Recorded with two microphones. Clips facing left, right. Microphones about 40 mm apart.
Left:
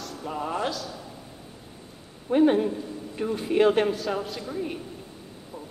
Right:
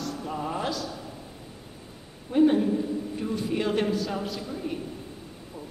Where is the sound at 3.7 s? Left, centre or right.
Centre.